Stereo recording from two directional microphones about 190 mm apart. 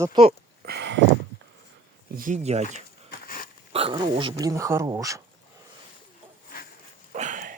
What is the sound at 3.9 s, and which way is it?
Speech, 25° right (ahead or behind).